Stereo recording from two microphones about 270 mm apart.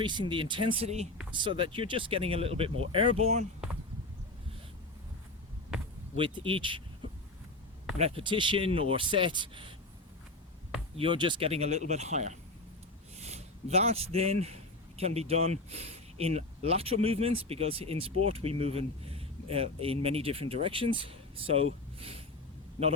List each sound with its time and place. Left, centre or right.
0.0 s speech: centre
6.1 s speech: centre
10.9 s speech: centre